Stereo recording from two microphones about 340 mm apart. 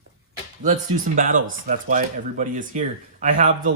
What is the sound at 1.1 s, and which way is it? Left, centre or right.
Speech, right.